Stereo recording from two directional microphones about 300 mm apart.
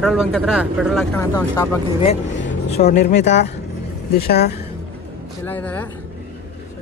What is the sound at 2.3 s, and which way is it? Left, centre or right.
Speech, left.